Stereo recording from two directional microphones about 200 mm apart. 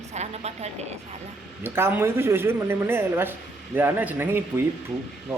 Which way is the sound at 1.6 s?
10° right (ahead or behind).